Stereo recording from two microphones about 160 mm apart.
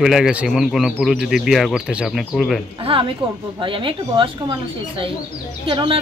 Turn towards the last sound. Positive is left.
turn(degrees=-35)  # may be behind; listen again after turning